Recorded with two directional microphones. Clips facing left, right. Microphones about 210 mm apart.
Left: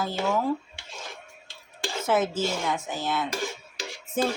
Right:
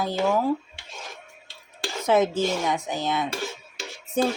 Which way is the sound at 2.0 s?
15° right (ahead or behind).